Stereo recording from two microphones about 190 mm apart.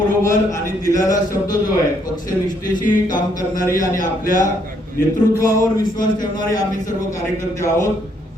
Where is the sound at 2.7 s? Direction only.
45° left (ahead or behind).